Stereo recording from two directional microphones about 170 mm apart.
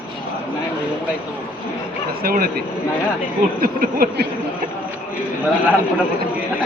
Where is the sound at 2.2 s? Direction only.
60° right (ahead or behind).